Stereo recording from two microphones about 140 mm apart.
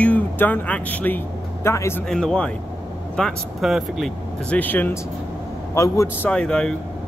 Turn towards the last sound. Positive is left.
turn(degrees=5)  # may be behind; listen again after turning